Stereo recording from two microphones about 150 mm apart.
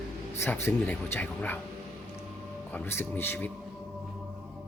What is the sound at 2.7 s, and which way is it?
Speech, 15° left (ahead or behind).